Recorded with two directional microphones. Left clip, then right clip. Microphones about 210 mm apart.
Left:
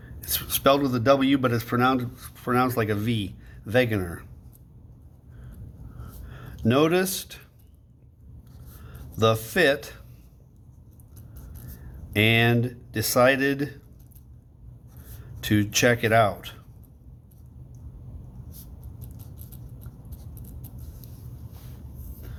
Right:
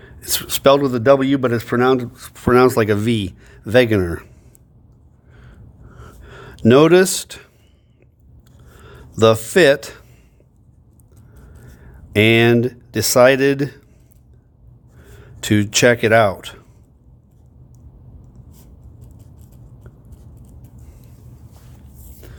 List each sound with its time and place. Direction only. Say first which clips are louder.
0.0 s a man's voice: right 9 dB; 45° right (ahead or behind)
6.0 s a sound: right 9 dB; 45° right (ahead or behind)
8.8 s speech: right 9 dB; 45° right (ahead or behind)
12.1 s a man's voice: right 8 dB; 45° right (ahead or behind)
15.2 s speech: right 6 dB; 45° right (ahead or behind)
22.2 s a sound: right 6 dB; 50° right (ahead or behind)